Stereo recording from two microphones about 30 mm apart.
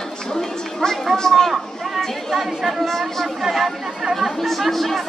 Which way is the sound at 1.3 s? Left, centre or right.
Centre.